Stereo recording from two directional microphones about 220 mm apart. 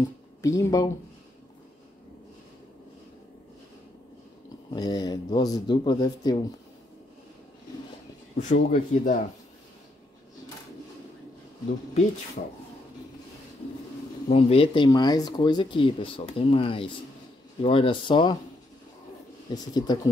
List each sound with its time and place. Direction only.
0.4 s speech: 15° left (ahead or behind)
4.7 s speech: 20° left (ahead or behind)
8.4 s speech: 35° left (ahead or behind)
12.4 s speech: 40° left (ahead or behind)
14.3 s speech: 25° left (ahead or behind)
19.5 s speech: 20° left (ahead or behind)